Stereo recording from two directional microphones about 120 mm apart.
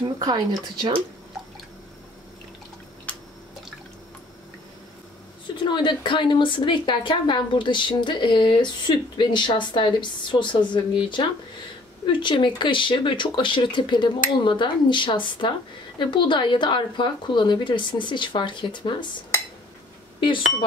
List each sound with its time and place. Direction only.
0.0 s speech: 35° right (ahead or behind)
5.6 s a woman's voice: 40° left (ahead or behind)
20.2 s speech: 45° left (ahead or behind)